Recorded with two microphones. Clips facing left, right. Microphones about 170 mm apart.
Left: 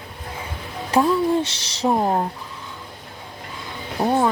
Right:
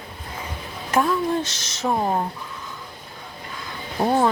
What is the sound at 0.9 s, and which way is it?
Speech, 35° left (ahead or behind).